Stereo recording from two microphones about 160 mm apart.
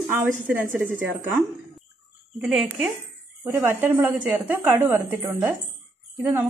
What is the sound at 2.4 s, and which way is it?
Speech, 5° right (ahead or behind).